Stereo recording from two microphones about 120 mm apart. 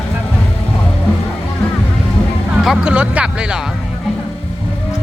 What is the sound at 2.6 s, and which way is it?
Music, 5° right (ahead or behind).